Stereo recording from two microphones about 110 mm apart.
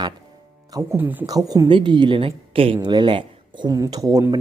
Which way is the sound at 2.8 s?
45° right (ahead or behind).